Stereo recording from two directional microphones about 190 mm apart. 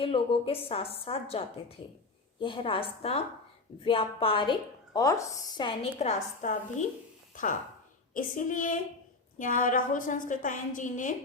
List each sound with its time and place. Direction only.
0.0 s a woman's voice: 30° left (ahead or behind)